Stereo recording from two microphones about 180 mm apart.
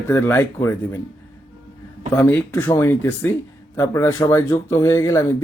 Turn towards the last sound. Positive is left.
turn(degrees=15)  # may be behind; listen again after turning